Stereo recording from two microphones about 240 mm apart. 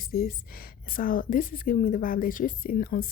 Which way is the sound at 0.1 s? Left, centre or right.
Left.